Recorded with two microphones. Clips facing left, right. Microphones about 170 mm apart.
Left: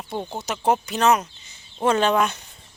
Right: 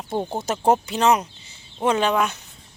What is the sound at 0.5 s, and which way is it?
Speech, 40° right (ahead or behind).